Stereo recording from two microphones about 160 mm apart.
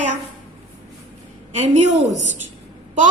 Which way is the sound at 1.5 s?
45° right (ahead or behind).